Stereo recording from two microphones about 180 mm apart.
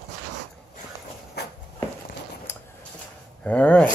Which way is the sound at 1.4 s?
65° left (ahead or behind).